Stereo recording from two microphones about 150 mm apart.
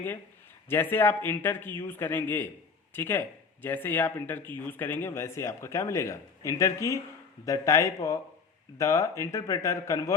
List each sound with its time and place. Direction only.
0.7 s speech: 15° left (ahead or behind)